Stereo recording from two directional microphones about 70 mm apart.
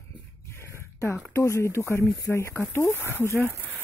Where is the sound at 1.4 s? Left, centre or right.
Left.